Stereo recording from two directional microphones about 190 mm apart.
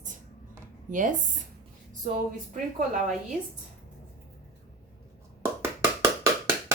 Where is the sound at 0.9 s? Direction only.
45° right (ahead or behind).